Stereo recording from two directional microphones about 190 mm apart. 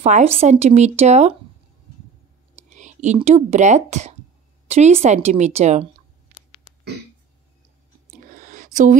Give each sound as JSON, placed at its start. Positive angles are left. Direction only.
{"t": 0.0, "sound": "a woman's voice", "side_deg": -35}
{"t": 2.5, "sound": "whispering", "side_deg": -40}
{"t": 3.2, "sound": "a woman's voice", "side_deg": -35}
{"t": 8.3, "sound": "a sound", "side_deg": -45}